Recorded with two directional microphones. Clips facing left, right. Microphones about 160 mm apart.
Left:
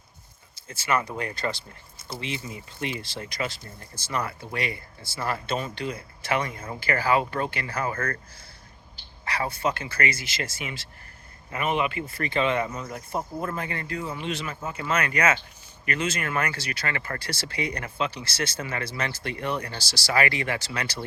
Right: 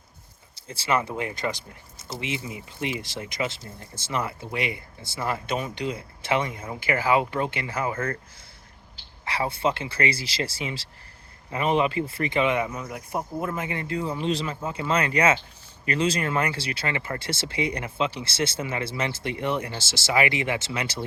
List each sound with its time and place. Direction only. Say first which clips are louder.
0.7 s speech: right 1 dB; 30° right (ahead or behind)